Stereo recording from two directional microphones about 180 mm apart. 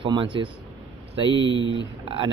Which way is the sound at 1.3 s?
90° right.